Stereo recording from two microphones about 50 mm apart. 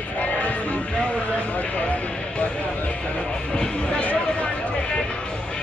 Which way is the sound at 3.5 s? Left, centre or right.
Centre.